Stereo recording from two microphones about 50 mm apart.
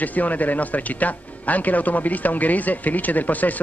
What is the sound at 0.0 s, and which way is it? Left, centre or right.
Speech, left.